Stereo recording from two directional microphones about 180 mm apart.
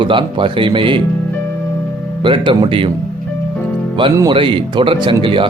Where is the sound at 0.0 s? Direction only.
25° right (ahead or behind).